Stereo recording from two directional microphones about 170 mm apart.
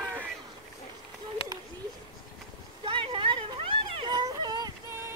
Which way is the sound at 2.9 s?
30° right (ahead or behind).